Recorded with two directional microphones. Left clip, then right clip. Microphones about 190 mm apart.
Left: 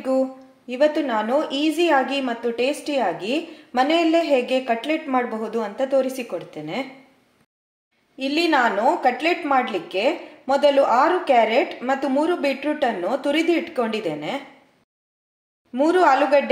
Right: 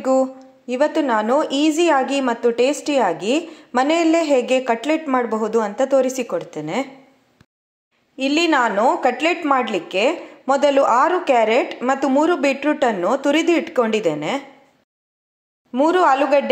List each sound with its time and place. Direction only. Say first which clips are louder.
0.0 s a woman's voice: right 4 dB; 30° right (ahead or behind)
8.2 s a woman's voice: right 2 dB; 30° right (ahead or behind)
15.7 s a woman's voice: right 2 dB; 25° right (ahead or behind)